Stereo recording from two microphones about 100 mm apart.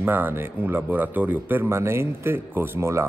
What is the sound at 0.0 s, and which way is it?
Speech, 20° right (ahead or behind).